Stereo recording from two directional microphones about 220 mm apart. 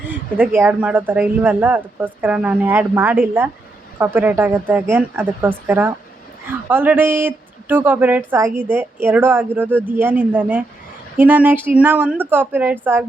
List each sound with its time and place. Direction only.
0.1 s speech: 10° right (ahead or behind)